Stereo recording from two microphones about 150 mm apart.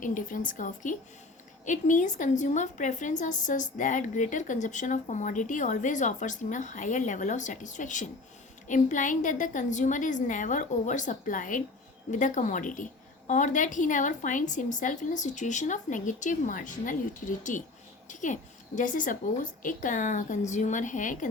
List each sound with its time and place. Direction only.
0.0 s a woman's voice: 60° left (ahead or behind)